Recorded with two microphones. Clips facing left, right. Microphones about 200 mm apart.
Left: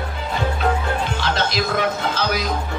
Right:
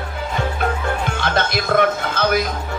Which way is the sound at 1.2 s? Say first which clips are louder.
Right 2 dB; 55° right (ahead or behind).